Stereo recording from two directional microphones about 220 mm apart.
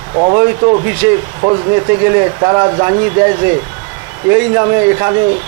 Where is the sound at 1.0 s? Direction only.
15° right (ahead or behind).